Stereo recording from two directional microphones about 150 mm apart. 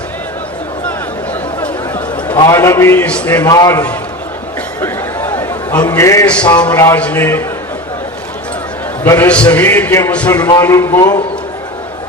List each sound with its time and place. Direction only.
2.4 s a man's voice: 20° left (ahead or behind)
3.5 s a man's voice: 20° left (ahead or behind)
4.8 s a sound: 15° left (ahead or behind)
6.2 s a man's voice: 10° left (ahead or behind)
9.0 s a man's voice: 15° left (ahead or behind)